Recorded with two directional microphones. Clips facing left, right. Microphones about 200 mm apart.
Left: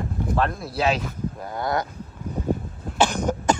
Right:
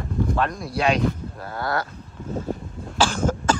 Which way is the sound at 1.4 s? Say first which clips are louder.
Even; 20° left (ahead or behind).